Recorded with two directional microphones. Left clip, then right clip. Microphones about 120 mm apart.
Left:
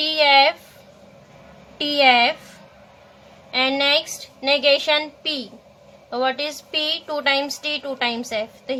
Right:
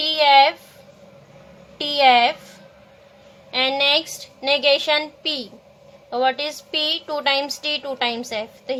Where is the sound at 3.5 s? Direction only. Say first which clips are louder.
Even; 15° right (ahead or behind).